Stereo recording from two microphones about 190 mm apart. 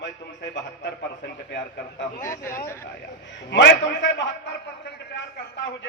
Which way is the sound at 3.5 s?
70° left (ahead or behind).